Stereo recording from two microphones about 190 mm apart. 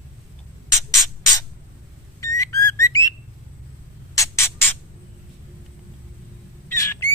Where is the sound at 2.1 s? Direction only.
15° left (ahead or behind).